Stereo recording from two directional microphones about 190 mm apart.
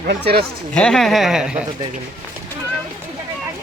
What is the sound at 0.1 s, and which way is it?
Speech, 55° right (ahead or behind).